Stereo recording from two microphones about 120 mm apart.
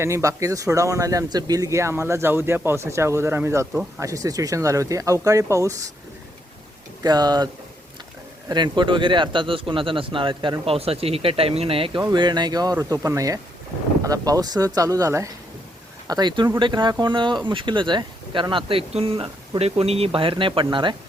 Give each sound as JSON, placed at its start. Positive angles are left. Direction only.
{"t": 0.0, "sound": "speech", "side_deg": -25}
{"t": 7.0, "sound": "speech", "side_deg": -35}
{"t": 12.1, "sound": "speech", "side_deg": -40}
{"t": 20.1, "sound": "speech", "side_deg": -45}